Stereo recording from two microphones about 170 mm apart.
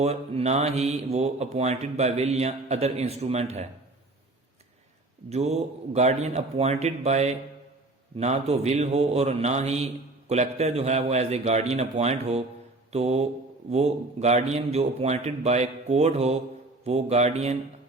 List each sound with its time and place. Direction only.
0.0 s a man's voice: 40° right (ahead or behind)
5.3 s a man's voice: 40° right (ahead or behind)